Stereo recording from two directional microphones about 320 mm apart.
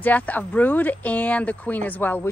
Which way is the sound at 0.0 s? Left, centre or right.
Centre.